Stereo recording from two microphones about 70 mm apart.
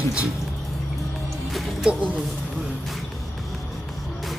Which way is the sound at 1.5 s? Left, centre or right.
Centre.